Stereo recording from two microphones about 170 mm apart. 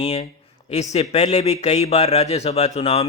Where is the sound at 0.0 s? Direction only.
35° left (ahead or behind).